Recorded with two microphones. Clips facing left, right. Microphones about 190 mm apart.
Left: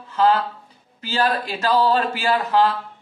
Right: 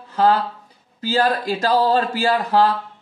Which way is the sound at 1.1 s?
35° right (ahead or behind).